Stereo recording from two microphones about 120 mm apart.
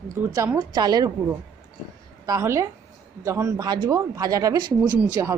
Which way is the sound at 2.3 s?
25° right (ahead or behind).